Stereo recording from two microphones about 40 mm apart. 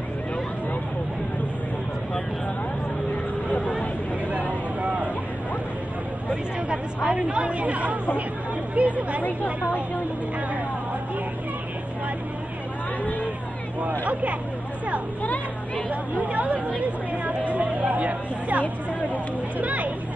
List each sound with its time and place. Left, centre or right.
3.4 s a sound: left
4.8 s vehicle: right
7.1 s a woman's voice: right
15.2 s speech: left
15.9 s a woman's voice: right
16.8 s chatter: right
18.6 s speech: left
19.6 s speech: right